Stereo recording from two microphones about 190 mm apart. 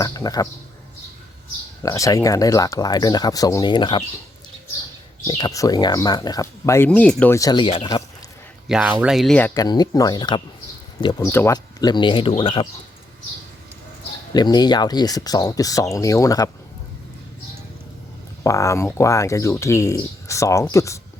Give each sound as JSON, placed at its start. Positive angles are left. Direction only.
{"t": 0.0, "sound": "bird", "side_deg": 20}
{"t": 1.8, "sound": "speech", "side_deg": 15}
{"t": 5.3, "sound": "speech", "side_deg": 20}
{"t": 8.7, "sound": "speech", "side_deg": -5}
{"t": 9.6, "sound": "speech", "side_deg": 20}
{"t": 14.3, "sound": "speech", "side_deg": 20}
{"t": 18.4, "sound": "speech", "side_deg": 15}